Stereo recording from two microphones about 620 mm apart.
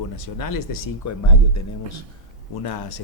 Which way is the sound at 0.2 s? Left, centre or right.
Left.